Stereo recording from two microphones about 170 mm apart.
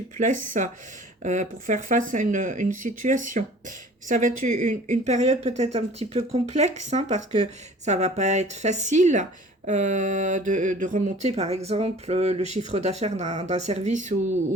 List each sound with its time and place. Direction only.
0.2 s speech: 50° right (ahead or behind)